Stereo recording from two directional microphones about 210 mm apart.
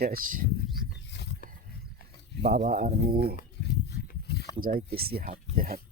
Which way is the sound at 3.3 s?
50° left (ahead or behind).